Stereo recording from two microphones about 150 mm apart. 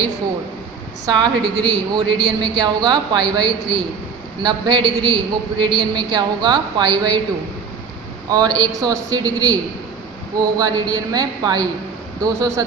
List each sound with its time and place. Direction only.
1.0 s a man's voice: 30° right (ahead or behind)
8.3 s a man's voice: 25° right (ahead or behind)
10.6 s a man's voice: 25° right (ahead or behind)